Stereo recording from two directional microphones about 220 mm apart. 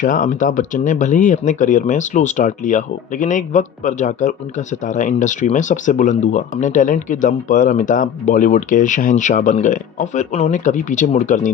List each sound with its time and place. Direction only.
0.0 s speech: 35° left (ahead or behind)